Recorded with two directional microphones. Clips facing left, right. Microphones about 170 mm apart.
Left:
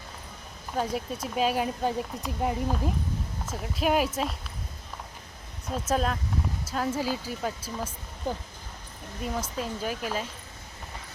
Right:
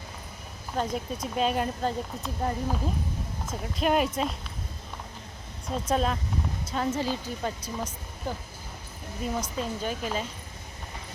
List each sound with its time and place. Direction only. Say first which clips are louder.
0.8 s speech: even; 5° left (ahead or behind)
5.6 s speech: right 1 dB; 5° left (ahead or behind)
8.3 s speech: left 2 dB; 15° left (ahead or behind)
9.2 s speech: right 1 dB; 5° left (ahead or behind)